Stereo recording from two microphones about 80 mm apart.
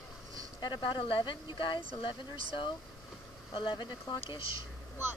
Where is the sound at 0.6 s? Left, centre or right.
Left.